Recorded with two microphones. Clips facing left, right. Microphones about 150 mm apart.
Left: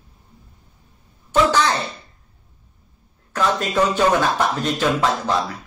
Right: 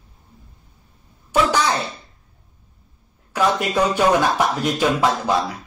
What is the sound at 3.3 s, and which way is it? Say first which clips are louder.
Speech: right 1 dB; 10° right (ahead or behind).